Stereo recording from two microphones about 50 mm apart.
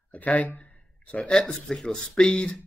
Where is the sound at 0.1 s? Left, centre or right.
Left.